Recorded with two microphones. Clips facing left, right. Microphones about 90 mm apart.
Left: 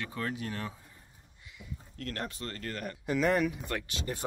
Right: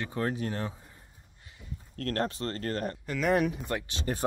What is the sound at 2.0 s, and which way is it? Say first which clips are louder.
Speech: right 7 dB; 45° right (ahead or behind).